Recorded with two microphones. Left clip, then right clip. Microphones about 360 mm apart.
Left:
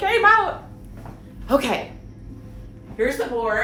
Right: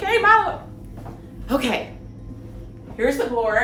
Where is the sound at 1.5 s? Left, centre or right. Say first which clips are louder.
Left 2 dB; centre.